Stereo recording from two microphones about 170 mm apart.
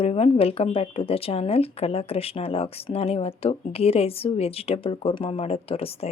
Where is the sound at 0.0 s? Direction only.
35° left (ahead or behind).